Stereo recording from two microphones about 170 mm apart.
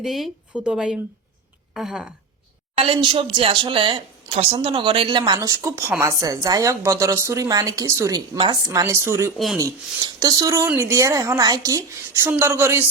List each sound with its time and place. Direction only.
0.0 s a woman's voice: centre (ahead or behind)
2.7 s speech: 35° right (ahead or behind); by 12.9 s 15° right (ahead or behind)